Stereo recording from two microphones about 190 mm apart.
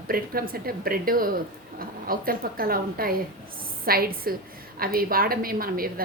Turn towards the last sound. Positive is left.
turn(degrees=-50)  # may be behind; listen again after turning